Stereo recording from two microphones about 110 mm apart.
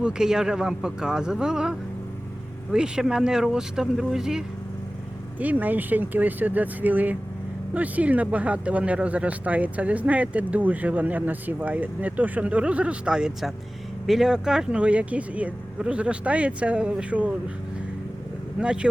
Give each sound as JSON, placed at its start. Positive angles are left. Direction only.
{"t": 0.0, "sound": "speech", "side_deg": -5}
{"t": 2.7, "sound": "speech", "side_deg": -5}
{"t": 5.4, "sound": "speech", "side_deg": -15}
{"t": 18.6, "sound": "speech", "side_deg": -10}